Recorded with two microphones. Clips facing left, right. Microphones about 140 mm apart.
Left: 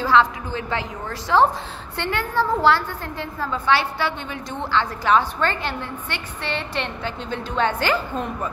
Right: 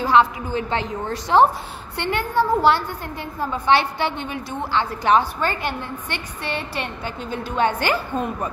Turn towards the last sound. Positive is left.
turn(degrees=-15)  # may be behind; listen again after turning